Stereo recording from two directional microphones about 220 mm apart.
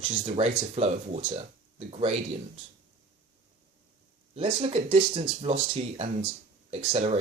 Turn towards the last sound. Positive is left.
turn(degrees=-30)  # may be behind; listen again after turning